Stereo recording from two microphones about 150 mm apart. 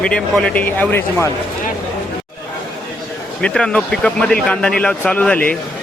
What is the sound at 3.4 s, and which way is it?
Speech, 5° left (ahead or behind).